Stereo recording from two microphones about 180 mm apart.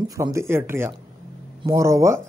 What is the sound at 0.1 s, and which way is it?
Speech, 15° right (ahead or behind).